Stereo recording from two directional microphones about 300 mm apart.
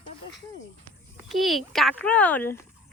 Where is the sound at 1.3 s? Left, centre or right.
Centre.